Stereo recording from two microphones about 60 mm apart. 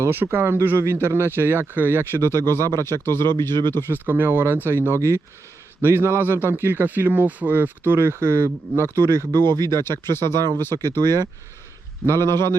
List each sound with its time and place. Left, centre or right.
0.0 s speech: right
3.0 s speech: left
3.8 s speech: right
4.9 s speech: right
9.0 s speech: right
9.8 s speech: left
11.0 s speech: right
12.2 s speech: left